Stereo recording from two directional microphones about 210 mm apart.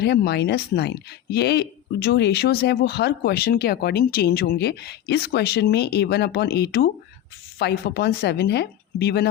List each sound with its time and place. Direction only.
0.0 s speech: 50° left (ahead or behind)